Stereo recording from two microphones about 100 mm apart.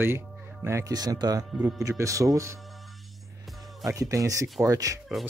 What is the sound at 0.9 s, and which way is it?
Speech, 40° right (ahead or behind).